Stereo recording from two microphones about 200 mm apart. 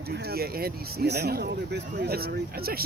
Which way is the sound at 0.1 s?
50° right (ahead or behind).